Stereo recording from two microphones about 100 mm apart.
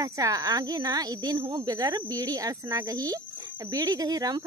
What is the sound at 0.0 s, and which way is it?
Speech, 35° right (ahead or behind).